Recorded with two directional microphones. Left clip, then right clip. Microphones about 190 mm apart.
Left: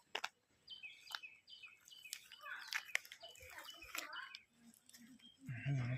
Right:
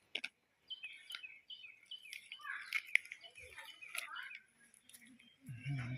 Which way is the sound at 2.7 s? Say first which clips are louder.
Right 4 dB; 30° left (ahead or behind).